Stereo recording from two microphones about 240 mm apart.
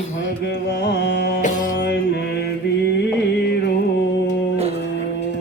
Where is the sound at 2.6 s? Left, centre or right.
Left.